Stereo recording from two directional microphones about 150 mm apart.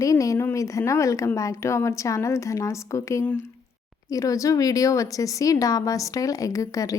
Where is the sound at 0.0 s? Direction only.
20° left (ahead or behind).